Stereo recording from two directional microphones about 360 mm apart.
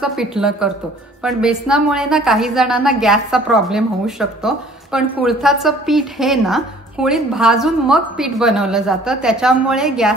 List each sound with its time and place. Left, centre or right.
0.0 s a woman's voice: centre